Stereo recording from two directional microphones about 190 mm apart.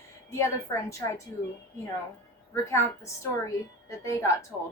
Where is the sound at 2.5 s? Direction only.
15° left (ahead or behind).